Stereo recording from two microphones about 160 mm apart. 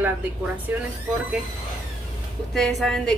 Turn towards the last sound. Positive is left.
turn(degrees=0)  # may be behind; listen again after turning